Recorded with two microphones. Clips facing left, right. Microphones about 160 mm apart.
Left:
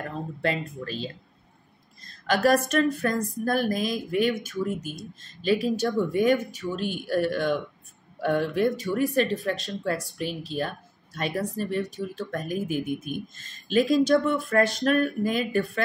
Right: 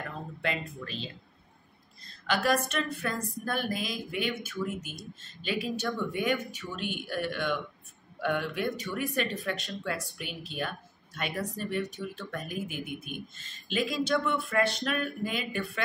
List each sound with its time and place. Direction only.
0.0 s speech: 40° left (ahead or behind)